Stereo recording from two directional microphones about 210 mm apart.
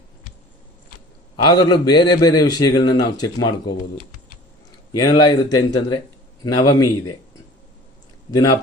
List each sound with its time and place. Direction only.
1.4 s a man's voice: 20° left (ahead or behind)
4.9 s a man's voice: 20° left (ahead or behind)
8.3 s a man's voice: 25° left (ahead or behind)